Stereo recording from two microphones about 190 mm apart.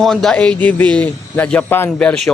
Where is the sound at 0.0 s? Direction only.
Centre (ahead or behind).